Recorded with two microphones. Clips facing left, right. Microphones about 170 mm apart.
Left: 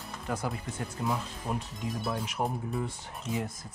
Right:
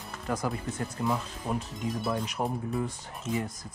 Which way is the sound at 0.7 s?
Centre (ahead or behind).